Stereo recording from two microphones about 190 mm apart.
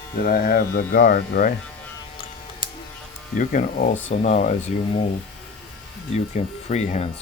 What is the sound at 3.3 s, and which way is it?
Speech, 45° left (ahead or behind).